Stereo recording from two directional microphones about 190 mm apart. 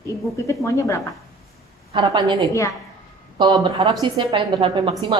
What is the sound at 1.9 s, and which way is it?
Speech, 25° right (ahead or behind).